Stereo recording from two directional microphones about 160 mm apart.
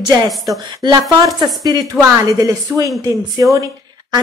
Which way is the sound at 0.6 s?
25° right (ahead or behind).